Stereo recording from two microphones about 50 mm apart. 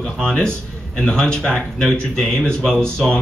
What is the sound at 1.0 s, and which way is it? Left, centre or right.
A man's voice, centre.